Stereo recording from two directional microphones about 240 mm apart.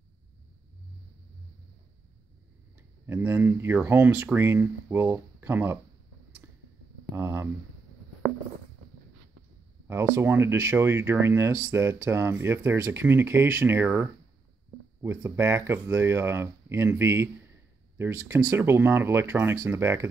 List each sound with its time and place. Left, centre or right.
3.1 s speech: centre
7.2 s speech: centre
9.8 s speech: centre